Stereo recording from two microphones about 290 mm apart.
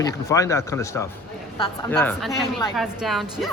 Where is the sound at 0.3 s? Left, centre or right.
Centre.